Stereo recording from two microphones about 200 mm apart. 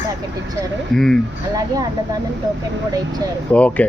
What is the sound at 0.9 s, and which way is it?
Speech, 5° left (ahead or behind).